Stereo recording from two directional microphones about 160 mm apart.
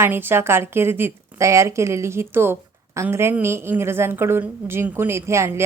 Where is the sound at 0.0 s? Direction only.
15° right (ahead or behind).